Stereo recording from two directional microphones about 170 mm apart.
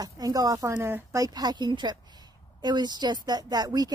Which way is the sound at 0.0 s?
20° right (ahead or behind).